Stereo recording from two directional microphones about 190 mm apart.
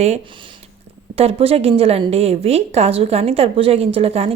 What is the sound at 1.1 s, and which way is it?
A woman's voice, 30° right (ahead or behind).